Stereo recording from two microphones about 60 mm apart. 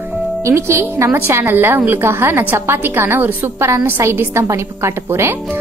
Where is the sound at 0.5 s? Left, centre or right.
Right.